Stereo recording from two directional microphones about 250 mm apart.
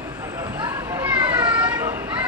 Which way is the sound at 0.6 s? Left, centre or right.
Centre.